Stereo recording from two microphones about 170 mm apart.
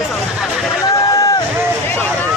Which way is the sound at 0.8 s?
20° left (ahead or behind).